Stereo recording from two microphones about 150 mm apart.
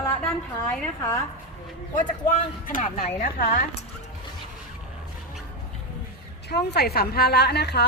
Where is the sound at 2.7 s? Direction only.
65° left (ahead or behind).